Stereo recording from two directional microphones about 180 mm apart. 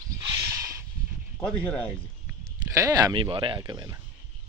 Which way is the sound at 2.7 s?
20° right (ahead or behind).